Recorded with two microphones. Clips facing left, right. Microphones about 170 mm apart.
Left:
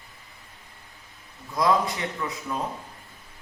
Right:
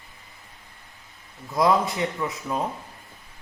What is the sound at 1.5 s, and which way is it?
Speech, 25° right (ahead or behind).